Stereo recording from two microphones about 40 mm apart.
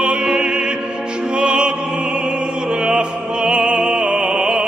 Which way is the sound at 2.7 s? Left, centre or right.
Right.